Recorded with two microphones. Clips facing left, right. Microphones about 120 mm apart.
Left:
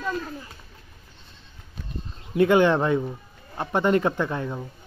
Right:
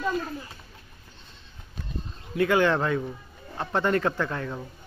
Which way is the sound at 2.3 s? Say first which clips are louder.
Left 4 dB; 20° left (ahead or behind).